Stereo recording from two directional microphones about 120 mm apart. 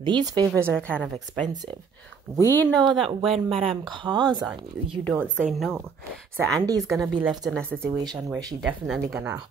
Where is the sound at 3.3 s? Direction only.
50° right (ahead or behind).